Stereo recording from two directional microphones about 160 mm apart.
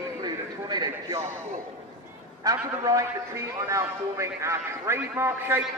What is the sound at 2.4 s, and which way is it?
A man's voice, 20° right (ahead or behind).